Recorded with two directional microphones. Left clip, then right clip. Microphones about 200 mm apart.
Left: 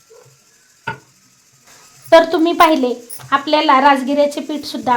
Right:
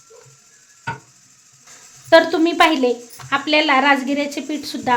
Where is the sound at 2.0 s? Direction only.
15° left (ahead or behind).